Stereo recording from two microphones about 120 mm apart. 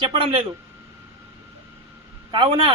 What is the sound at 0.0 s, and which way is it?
Speech, 45° right (ahead or behind).